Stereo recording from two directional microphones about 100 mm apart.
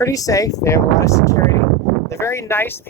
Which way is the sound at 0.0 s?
35° left (ahead or behind).